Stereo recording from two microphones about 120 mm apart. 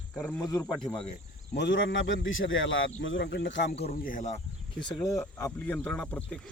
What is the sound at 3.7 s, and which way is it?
Speech, 70° left (ahead or behind).